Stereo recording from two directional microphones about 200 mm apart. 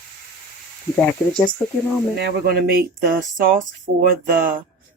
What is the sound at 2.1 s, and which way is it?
Speech, 55° right (ahead or behind).